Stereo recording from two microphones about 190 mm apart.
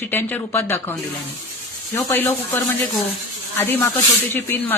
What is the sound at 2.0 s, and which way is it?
Speech, 15° left (ahead or behind).